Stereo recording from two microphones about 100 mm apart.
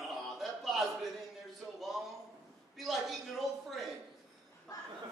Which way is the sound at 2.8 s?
Centre (ahead or behind).